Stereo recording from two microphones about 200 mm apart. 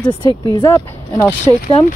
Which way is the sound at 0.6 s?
15° left (ahead or behind).